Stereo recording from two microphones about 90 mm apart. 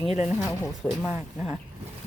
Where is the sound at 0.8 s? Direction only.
20° left (ahead or behind).